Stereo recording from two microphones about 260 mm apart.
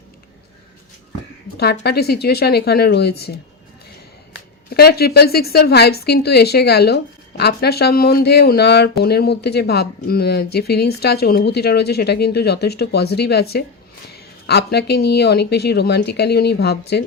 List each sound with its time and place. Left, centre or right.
1.5 s a woman's voice: left
4.7 s a woman's voice: left